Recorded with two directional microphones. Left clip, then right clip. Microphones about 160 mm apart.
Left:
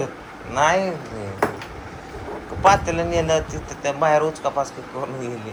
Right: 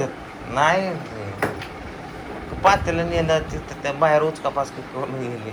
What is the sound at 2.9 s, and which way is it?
Speech, 35° left (ahead or behind).